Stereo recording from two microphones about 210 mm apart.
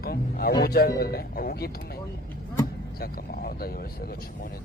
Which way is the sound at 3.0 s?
45° left (ahead or behind).